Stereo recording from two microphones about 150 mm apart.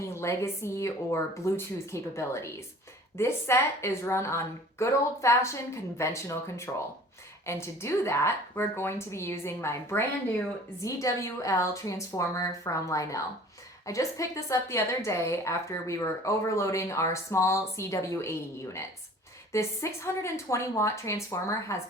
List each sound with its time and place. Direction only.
0.0 s a woman's voice: 20° left (ahead or behind)